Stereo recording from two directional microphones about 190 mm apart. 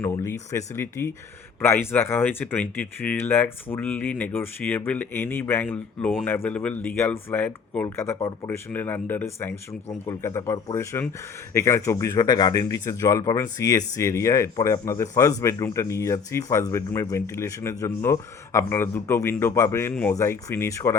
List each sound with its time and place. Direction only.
0.0 s speech: 15° left (ahead or behind)